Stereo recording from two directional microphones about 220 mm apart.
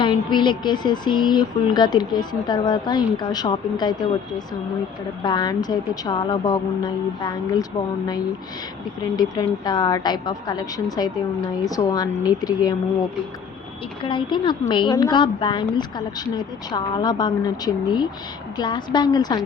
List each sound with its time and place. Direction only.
0.0 s speech: 20° left (ahead or behind)
5.2 s a woman's voice: 20° left (ahead or behind)
14.0 s speech: 20° left (ahead or behind)